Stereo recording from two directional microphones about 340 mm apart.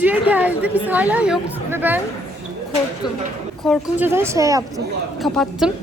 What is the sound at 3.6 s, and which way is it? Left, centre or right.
A woman's voice, centre.